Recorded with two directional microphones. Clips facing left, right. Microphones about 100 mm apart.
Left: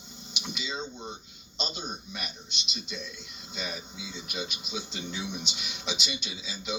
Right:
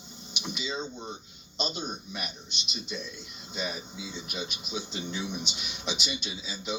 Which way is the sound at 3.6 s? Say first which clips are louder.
Right 2 dB; 15° right (ahead or behind).